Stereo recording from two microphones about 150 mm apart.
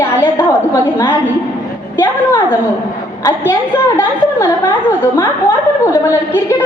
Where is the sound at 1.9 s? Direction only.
15° left (ahead or behind).